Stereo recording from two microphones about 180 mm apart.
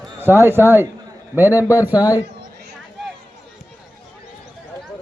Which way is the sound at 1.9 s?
20° left (ahead or behind).